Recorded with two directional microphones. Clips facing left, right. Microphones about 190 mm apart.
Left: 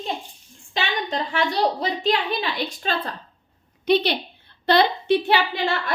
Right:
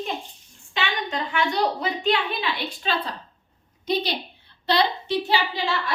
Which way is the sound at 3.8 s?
65° left (ahead or behind).